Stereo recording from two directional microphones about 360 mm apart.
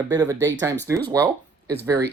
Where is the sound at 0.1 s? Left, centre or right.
Centre.